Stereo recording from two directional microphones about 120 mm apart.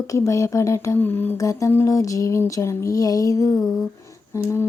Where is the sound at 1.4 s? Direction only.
25° left (ahead or behind).